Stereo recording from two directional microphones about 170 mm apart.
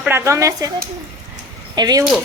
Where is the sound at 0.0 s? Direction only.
15° right (ahead or behind).